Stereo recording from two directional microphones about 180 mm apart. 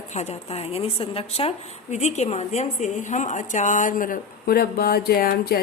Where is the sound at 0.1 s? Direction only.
40° left (ahead or behind).